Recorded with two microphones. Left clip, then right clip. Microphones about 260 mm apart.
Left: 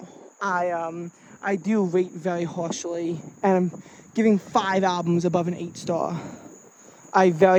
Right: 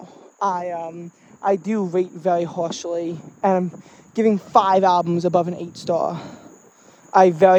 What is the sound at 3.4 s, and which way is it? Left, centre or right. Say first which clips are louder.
Speech: right 3 dB; left.